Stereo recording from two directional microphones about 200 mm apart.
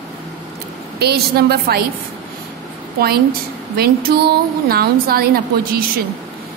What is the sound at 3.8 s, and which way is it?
A woman's voice, 50° right (ahead or behind).